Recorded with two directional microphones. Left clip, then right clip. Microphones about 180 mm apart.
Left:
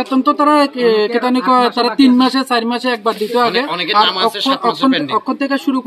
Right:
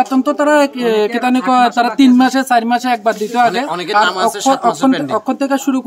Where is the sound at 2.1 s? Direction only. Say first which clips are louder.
Right 2 dB; 25° right (ahead or behind).